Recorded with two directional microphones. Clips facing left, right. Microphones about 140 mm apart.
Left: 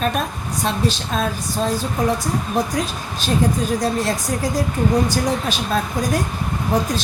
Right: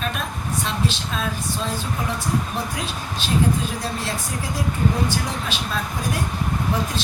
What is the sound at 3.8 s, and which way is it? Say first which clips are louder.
Speech: left 7 dB; 40° left (ahead or behind).